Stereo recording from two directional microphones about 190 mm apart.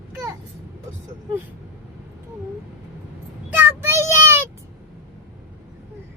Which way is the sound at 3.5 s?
15° right (ahead or behind).